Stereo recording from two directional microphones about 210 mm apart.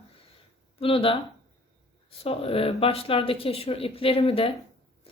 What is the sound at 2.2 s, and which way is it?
Speech, 25° left (ahead or behind).